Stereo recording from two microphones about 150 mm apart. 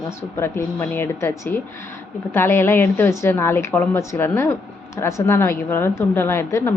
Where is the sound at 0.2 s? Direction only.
15° left (ahead or behind).